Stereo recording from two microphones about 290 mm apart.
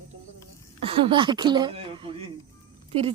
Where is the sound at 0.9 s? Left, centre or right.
Centre.